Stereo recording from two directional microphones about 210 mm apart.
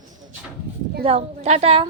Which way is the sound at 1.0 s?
30° right (ahead or behind).